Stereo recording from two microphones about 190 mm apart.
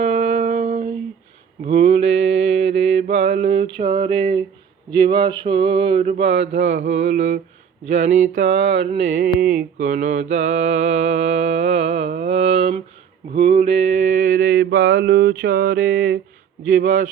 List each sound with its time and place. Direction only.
0.0 s music: 35° right (ahead or behind)
1.6 s mantra: 35° right (ahead or behind)
3.1 s mantra: 60° right (ahead or behind)
3.5 s a sound: 30° right (ahead or behind)
4.9 s mantra: 25° right (ahead or behind)
12.3 s a sound: 60° right (ahead or behind)
12.5 s mantra: 30° right (ahead or behind)